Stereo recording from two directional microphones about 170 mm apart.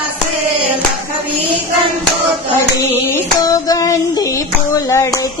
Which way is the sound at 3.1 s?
20° left (ahead or behind).